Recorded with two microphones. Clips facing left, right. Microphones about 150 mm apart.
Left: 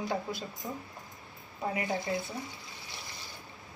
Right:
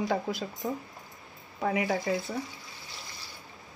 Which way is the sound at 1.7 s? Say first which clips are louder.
Right 5 dB; 90° right.